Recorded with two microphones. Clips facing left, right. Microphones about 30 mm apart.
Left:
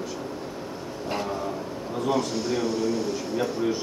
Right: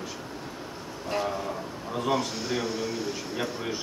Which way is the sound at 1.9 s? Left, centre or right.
Centre.